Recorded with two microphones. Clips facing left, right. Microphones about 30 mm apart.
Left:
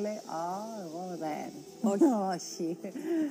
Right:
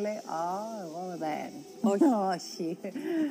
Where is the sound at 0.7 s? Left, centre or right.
Right.